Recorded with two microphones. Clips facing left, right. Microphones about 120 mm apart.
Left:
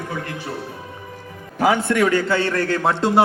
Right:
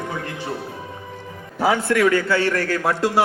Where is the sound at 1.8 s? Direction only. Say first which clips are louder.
Even; 30° left (ahead or behind).